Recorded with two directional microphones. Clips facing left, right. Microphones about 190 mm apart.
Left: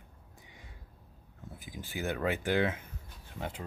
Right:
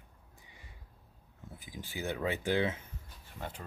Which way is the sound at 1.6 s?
15° left (ahead or behind).